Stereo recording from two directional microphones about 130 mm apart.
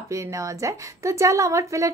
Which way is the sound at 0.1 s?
25° right (ahead or behind).